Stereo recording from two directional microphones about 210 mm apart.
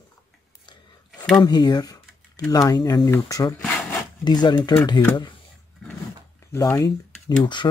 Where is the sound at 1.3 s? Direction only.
20° left (ahead or behind).